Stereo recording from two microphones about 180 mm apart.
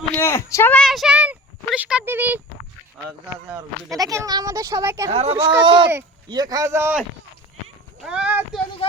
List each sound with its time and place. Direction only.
0.2 s speech: 15° left (ahead or behind); by 2.4 s 10° right (ahead or behind)
3.9 s a child's voice: 20° right (ahead or behind)
5.1 s speech: 35° right (ahead or behind); by 7.0 s 15° right (ahead or behind)
8.0 s clip-clop: 5° right (ahead or behind)
8.8 s a sound: 30° left (ahead or behind)